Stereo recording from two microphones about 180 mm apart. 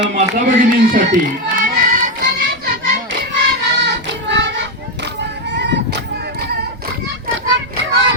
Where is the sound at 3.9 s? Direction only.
75° right (ahead or behind).